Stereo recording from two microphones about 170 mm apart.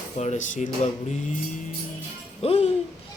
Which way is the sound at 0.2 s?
45° left (ahead or behind).